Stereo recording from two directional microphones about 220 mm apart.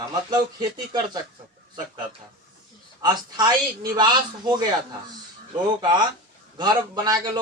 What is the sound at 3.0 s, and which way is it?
A man's voice, 20° right (ahead or behind).